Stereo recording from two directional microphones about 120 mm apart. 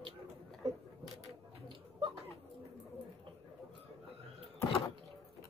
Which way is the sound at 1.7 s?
40° right (ahead or behind).